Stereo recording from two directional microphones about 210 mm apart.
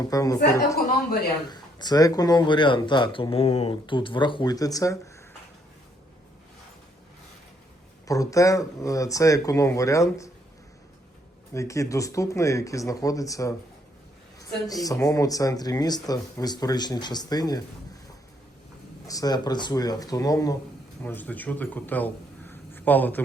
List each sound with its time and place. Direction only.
0.1 s speech: 15° left (ahead or behind)
1.5 s speech: 20° left (ahead or behind)
8.0 s speech: 15° left (ahead or behind)
11.5 s speech: 15° left (ahead or behind)
19.0 s speech: 15° left (ahead or behind)